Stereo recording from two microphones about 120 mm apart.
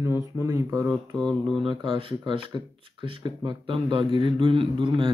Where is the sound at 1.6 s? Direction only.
45° right (ahead or behind).